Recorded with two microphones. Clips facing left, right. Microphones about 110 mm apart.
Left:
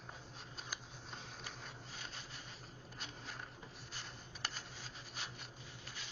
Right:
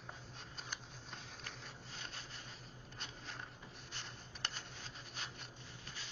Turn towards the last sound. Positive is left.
turn(degrees=0)  # may be behind; listen again after turning